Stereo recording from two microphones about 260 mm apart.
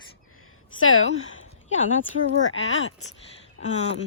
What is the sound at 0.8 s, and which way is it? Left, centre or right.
Speech, left.